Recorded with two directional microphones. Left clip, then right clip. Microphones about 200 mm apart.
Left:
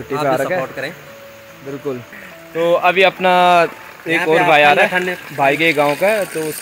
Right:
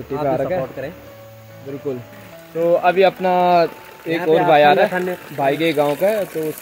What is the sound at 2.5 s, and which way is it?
Speech, 5° right (ahead or behind).